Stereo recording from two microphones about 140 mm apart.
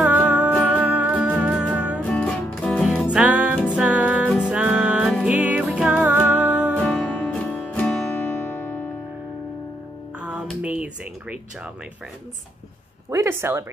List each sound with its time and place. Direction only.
0.0 s music: 5° right (ahead or behind)
0.5 s music: 10° left (ahead or behind)
0.7 s music: 10° right (ahead or behind)
2.0 s music: 5° left (ahead or behind)
2.8 s music: 5° right (ahead or behind)
6.8 s music: 10° left (ahead or behind)
10.2 s a sound: 10° right (ahead or behind)
13.1 s speech: 20° right (ahead or behind)